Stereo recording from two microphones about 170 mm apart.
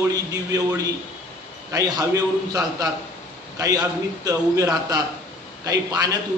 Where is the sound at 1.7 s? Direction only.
20° right (ahead or behind).